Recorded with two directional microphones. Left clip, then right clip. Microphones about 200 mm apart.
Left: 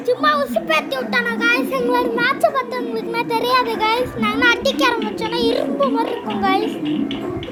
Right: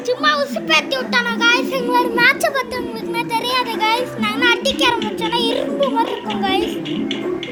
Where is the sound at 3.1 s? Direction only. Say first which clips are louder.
Left 2 dB; 20° left (ahead or behind).